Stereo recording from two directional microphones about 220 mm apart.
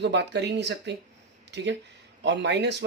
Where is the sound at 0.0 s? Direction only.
50° right (ahead or behind).